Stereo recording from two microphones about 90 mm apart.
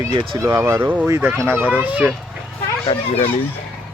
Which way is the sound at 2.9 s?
60° left (ahead or behind).